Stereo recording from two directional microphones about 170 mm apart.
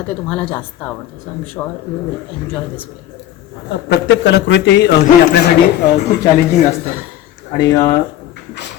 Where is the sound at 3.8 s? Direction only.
90° left.